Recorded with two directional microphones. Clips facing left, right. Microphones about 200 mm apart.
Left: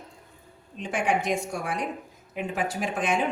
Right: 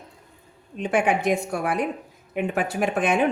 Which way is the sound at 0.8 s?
60° right (ahead or behind).